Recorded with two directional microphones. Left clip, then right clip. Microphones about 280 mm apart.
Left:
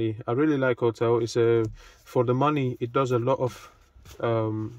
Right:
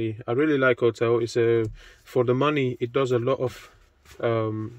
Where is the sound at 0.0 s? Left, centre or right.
Centre.